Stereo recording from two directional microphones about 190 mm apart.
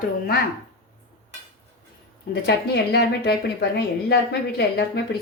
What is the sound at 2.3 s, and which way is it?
A woman's voice, 60° left (ahead or behind).